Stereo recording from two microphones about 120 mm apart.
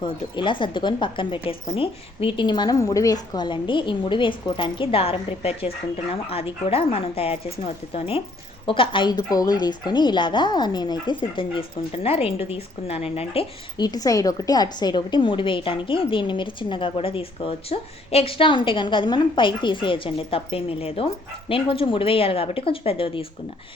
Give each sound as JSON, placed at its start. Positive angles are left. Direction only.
{"t": 0.0, "sound": "a woman's voice", "side_deg": 40}
{"t": 2.8, "sound": "a woman's voice", "side_deg": 30}
{"t": 13.7, "sound": "a woman's voice", "side_deg": 35}